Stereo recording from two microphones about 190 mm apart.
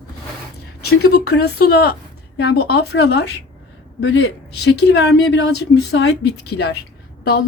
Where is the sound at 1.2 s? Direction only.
60° left (ahead or behind).